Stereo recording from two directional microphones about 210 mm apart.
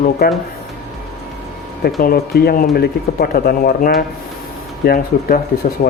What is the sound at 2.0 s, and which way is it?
Speech, 45° left (ahead or behind).